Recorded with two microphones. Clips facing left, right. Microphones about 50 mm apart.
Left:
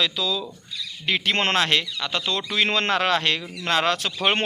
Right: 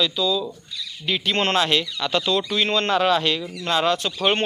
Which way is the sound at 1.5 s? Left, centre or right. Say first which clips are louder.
Right 2 dB; left.